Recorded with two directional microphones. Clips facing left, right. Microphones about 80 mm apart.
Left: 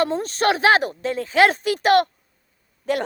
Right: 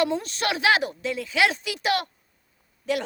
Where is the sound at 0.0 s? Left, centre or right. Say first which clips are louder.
Left 4 dB; left.